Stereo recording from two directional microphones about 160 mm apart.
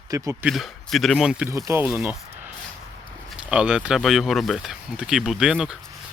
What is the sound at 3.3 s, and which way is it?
Speech, 5° right (ahead or behind).